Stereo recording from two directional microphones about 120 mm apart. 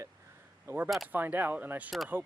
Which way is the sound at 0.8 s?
Centre (ahead or behind).